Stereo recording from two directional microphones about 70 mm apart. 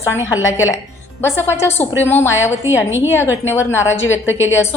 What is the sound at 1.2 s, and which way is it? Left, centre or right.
A woman's voice, left.